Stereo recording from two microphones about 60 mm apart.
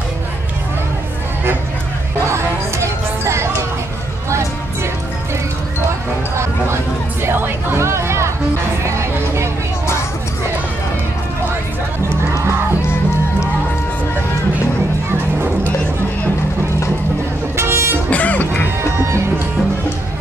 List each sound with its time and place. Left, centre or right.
2.2 s music: right
7.2 s music: right
17.6 s vehicle: right
18.1 s music: left